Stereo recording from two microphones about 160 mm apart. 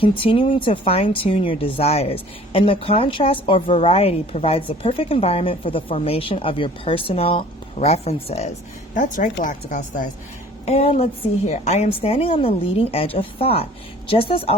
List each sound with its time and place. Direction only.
0.0 s speech: 35° left (ahead or behind)
9.0 s speech: 50° left (ahead or behind)
10.7 s speech: 40° left (ahead or behind)